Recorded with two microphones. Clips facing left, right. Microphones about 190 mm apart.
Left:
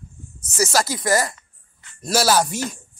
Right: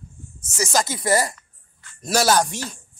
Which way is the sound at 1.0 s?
30° right (ahead or behind).